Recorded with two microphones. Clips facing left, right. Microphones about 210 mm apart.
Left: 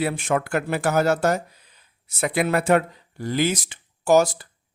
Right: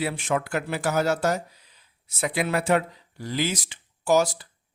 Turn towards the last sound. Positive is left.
turn(degrees=50)  # may be behind; listen again after turning